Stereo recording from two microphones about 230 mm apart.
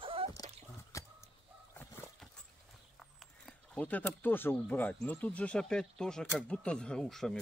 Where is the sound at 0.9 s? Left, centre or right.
Centre.